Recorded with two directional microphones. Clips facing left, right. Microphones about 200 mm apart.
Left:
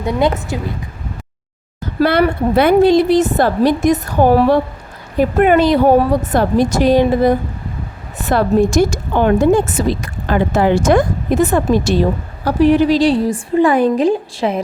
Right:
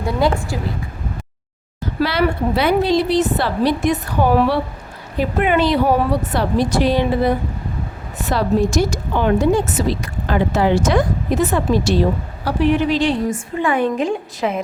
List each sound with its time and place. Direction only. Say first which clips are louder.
0.0 s a woman's voice: left 2 dB; 20° left (ahead or behind)
2.0 s a woman's voice: left 5 dB; 55° left (ahead or behind)
12.5 s a woman's voice: left 5 dB; 40° left (ahead or behind)